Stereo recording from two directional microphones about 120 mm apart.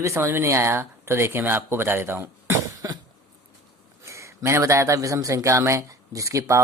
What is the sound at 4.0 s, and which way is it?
Speech, 25° right (ahead or behind).